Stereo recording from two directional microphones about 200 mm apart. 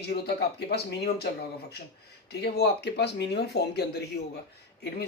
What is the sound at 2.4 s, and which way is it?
Speech, 55° left (ahead or behind).